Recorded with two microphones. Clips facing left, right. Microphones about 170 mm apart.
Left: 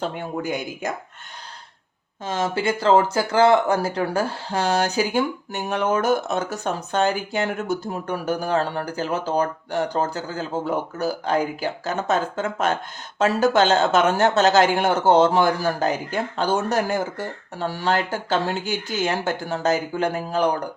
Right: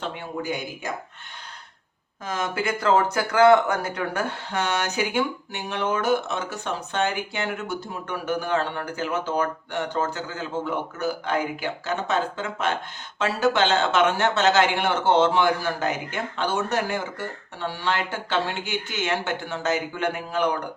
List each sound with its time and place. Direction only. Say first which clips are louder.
0.0 s speech: left 4 dB; 45° left (ahead or behind)
2.2 s speech: left 4 dB; 30° left (ahead or behind)